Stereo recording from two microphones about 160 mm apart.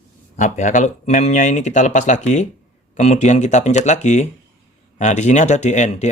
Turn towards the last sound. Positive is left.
turn(degrees=45)  # may be behind; listen again after turning